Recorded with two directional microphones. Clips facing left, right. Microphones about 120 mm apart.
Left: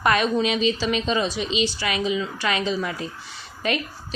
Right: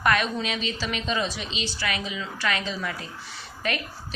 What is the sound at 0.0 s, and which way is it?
A woman's voice, 25° left (ahead or behind).